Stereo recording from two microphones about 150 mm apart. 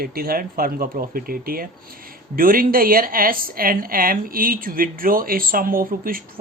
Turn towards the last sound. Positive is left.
turn(degrees=-70)  # may be behind; listen again after turning